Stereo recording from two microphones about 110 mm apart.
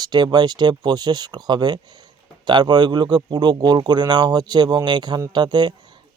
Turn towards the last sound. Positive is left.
turn(degrees=-40)  # may be behind; listen again after turning